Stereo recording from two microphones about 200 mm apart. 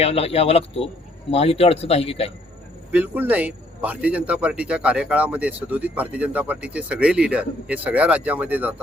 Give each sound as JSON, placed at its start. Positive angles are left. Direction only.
{"t": 0.0, "sound": "speech", "side_deg": 30}
{"t": 2.9, "sound": "a man's voice", "side_deg": -10}